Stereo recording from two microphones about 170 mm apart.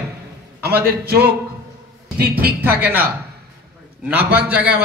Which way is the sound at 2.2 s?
65° right (ahead or behind).